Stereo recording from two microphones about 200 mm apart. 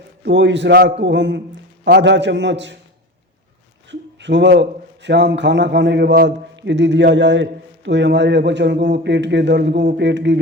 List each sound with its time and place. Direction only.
0.2 s a man's voice: 60° right (ahead or behind)
4.2 s a man's voice: 60° right (ahead or behind)